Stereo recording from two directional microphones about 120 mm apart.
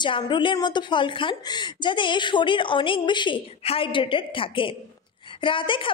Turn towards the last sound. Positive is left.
turn(degrees=45)  # may be behind; listen again after turning